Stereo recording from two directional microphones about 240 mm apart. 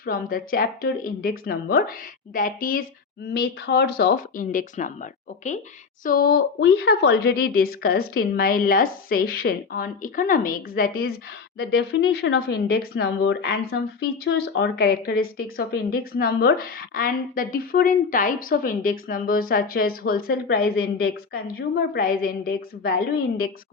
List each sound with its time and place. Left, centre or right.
0.0 s a woman's voice: left
6.1 s a woman's voice: left